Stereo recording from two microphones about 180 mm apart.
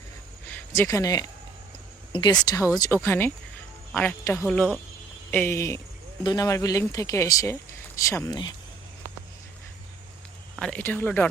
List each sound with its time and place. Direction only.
0.4 s a sound: 15° left (ahead or behind)
2.1 s speech: 25° left (ahead or behind)
10.5 s speech: 5° left (ahead or behind)